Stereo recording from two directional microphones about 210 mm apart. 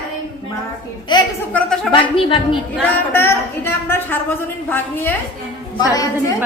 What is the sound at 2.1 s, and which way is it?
Speech, 25° left (ahead or behind).